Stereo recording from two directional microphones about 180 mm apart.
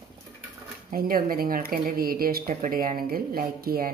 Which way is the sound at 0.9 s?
55° right (ahead or behind).